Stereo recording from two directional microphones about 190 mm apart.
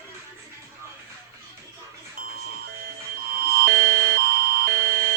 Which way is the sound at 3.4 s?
55° right (ahead or behind).